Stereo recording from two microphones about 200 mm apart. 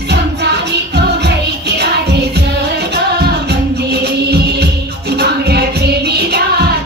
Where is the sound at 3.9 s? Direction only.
55° right (ahead or behind).